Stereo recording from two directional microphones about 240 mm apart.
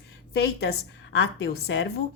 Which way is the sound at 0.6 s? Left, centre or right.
Left.